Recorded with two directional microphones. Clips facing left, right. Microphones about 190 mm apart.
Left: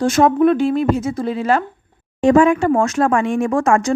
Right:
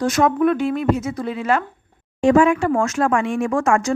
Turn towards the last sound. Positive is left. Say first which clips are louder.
# left 3 dB
turn(degrees=35)  # may be behind; listen again after turning